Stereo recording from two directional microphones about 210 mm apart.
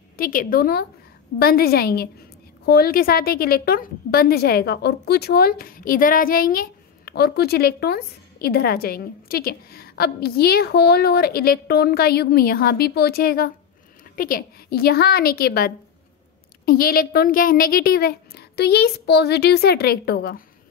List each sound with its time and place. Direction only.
0.2 s a woman's voice: 40° left (ahead or behind)